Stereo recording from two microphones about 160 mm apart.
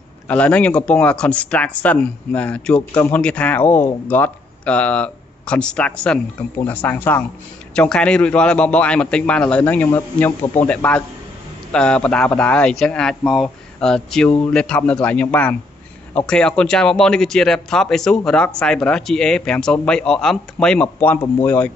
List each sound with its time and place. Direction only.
0.3 s a man's voice: 10° left (ahead or behind)